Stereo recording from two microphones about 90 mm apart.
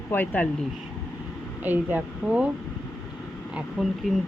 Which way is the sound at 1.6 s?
20° right (ahead or behind).